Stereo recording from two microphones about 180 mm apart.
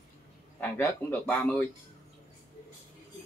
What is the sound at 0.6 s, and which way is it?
Speech, 10° left (ahead or behind).